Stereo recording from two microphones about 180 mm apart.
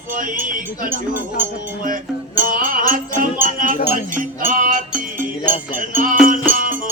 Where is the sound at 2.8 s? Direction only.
50° right (ahead or behind).